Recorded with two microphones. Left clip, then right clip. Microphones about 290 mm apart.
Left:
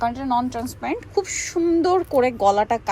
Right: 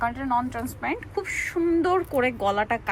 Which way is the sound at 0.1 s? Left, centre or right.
Centre.